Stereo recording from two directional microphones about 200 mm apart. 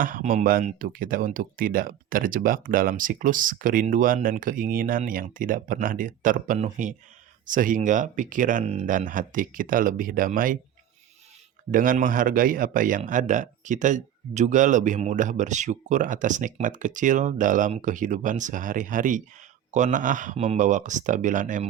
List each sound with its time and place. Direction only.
0.0 s a man's voice: 45° right (ahead or behind)
11.7 s a man's voice: 40° right (ahead or behind)